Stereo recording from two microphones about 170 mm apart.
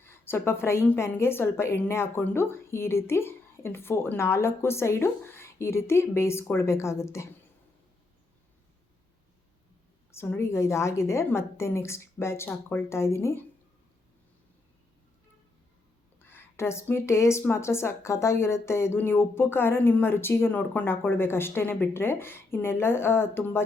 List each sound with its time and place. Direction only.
0.0 s speech: 15° left (ahead or behind)
10.1 s speech: 15° left (ahead or behind)
16.3 s speech: 15° left (ahead or behind)